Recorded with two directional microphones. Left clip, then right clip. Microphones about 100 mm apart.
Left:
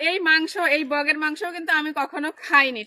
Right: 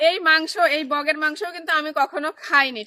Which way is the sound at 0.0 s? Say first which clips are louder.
Right 2 dB; 35° right (ahead or behind).